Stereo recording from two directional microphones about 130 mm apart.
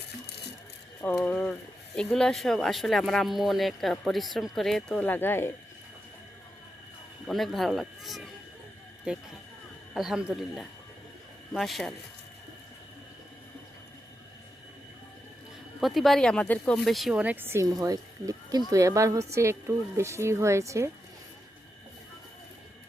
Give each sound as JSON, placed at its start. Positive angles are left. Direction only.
{"t": 1.0, "sound": "speech", "side_deg": 10}
{"t": 7.3, "sound": "speech", "side_deg": 0}
{"t": 15.8, "sound": "speech", "side_deg": 0}